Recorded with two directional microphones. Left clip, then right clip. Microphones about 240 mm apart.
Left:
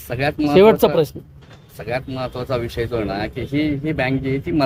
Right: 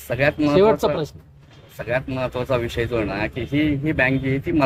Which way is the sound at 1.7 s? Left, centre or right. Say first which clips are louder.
Right 1 dB; centre.